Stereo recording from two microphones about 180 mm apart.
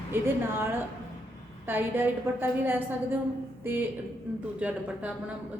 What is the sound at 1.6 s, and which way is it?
A woman's voice, 10° right (ahead or behind).